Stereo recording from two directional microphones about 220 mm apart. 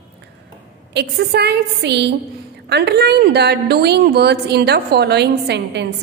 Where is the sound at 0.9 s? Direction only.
50° right (ahead or behind).